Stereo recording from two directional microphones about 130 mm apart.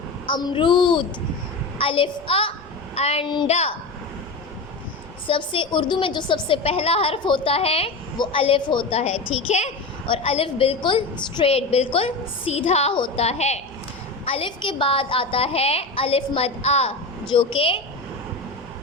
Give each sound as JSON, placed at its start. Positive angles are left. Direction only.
{"t": 0.3, "sound": "a woman's voice", "side_deg": 35}
{"t": 5.3, "sound": "a woman's voice", "side_deg": 40}
{"t": 9.0, "sound": "a woman's voice", "side_deg": 55}
{"t": 10.1, "sound": "a woman's voice", "side_deg": 45}
{"t": 11.5, "sound": "a woman's voice", "side_deg": 50}
{"t": 12.9, "sound": "a woman's voice", "side_deg": 40}
{"t": 13.2, "sound": "a woman's voice", "side_deg": 55}
{"t": 14.3, "sound": "a woman's voice", "side_deg": 45}
{"t": 17.2, "sound": "a woman's voice", "side_deg": 40}